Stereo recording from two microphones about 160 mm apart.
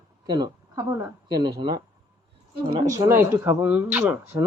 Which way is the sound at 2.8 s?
20° right (ahead or behind).